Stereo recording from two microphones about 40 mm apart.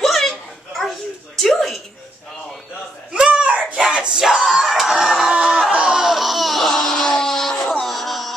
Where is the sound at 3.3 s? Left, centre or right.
Right.